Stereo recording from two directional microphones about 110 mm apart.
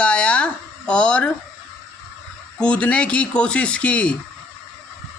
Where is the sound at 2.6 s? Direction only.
10° left (ahead or behind).